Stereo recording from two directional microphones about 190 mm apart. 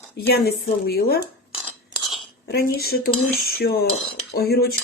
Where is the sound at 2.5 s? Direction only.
55° left (ahead or behind).